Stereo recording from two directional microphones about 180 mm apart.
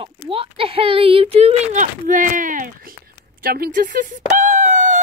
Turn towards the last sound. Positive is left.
turn(degrees=-45)  # may be behind; listen again after turning